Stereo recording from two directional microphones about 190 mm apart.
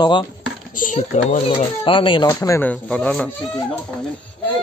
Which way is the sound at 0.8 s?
40° left (ahead or behind).